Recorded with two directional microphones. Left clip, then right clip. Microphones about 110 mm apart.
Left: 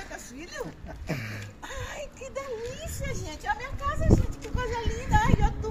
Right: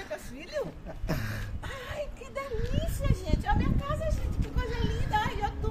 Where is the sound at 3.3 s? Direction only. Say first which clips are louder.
Right 1 dB; 10° right (ahead or behind).